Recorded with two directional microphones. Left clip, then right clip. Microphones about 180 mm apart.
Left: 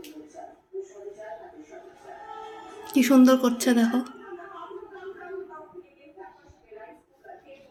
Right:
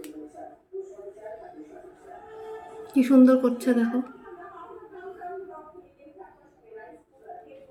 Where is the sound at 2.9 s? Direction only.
45° left (ahead or behind).